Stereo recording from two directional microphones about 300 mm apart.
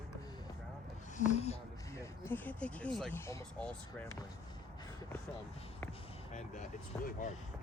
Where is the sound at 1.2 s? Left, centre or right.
Left.